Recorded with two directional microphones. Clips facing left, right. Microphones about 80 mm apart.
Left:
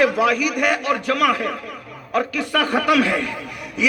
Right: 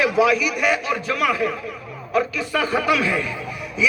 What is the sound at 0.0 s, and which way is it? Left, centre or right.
A man's voice, left.